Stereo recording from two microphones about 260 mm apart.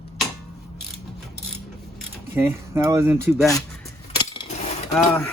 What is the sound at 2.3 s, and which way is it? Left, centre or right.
Speech, centre.